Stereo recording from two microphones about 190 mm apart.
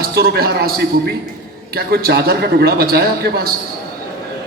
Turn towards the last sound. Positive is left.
turn(degrees=-55)  # may be behind; listen again after turning